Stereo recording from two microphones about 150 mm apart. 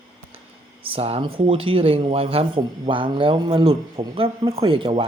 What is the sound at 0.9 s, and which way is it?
Speech, 40° right (ahead or behind).